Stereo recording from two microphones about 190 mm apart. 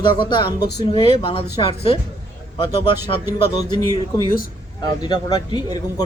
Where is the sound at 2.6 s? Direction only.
30° left (ahead or behind).